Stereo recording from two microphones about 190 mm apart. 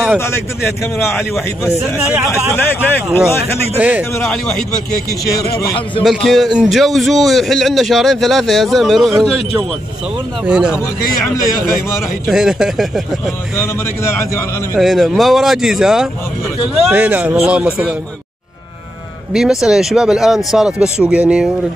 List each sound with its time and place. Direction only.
0.2 s speech: 15° left (ahead or behind)
2.5 s speech: 10° left (ahead or behind)
3.7 s speech: 10° right (ahead or behind)
5.6 s a man's voice: 20° left (ahead or behind)
6.0 s a man's voice: centre (ahead or behind)
10.4 s a man's voice: 5° right (ahead or behind)
12.3 s a man's voice: 5° right (ahead or behind)
13.6 s speech: 15° left (ahead or behind)
14.8 s a man's voice: centre (ahead or behind)
19.3 s a man's voice: 5° right (ahead or behind)